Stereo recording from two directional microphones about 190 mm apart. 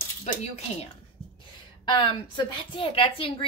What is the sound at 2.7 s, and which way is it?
Speech, 30° left (ahead or behind).